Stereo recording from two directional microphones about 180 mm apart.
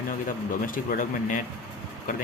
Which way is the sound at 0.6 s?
50° left (ahead or behind).